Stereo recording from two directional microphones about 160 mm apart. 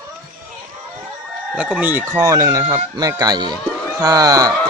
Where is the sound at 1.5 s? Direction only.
10° right (ahead or behind).